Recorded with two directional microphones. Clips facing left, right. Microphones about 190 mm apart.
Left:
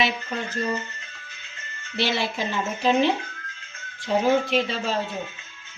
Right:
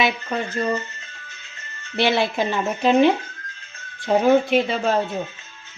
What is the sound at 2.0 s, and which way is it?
Speech, 60° right (ahead or behind).